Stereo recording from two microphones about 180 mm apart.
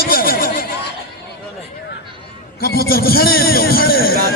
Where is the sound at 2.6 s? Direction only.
60° left (ahead or behind).